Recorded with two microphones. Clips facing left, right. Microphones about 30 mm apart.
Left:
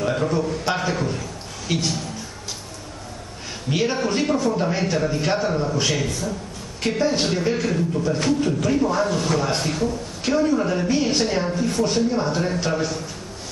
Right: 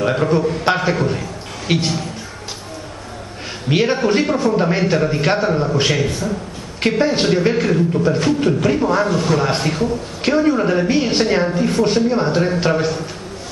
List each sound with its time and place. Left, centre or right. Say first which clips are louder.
0.0 s a man's voice: right 6 dB; right
3.6 s a man's voice: right 6 dB; right
9.4 s a man's voice: right 4 dB; right